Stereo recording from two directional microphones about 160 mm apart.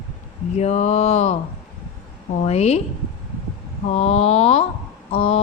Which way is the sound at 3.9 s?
40° left (ahead or behind).